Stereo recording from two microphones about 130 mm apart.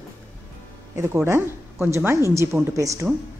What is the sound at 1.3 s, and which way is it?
A woman's voice, 20° right (ahead or behind).